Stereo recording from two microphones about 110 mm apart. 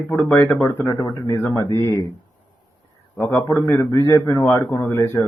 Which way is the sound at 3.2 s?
25° left (ahead or behind).